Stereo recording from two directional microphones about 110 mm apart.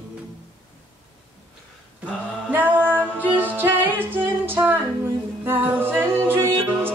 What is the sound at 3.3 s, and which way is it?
Music, 15° right (ahead or behind).